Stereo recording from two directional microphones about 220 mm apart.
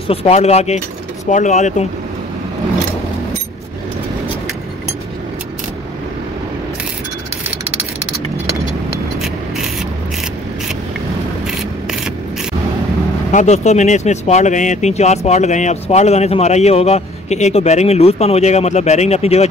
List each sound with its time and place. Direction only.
0.1 s cutlery: 30° left (ahead or behind)
1.2 s speech: 35° left (ahead or behind)
11.4 s a sound: centre (ahead or behind)
13.3 s speech: 35° left (ahead or behind)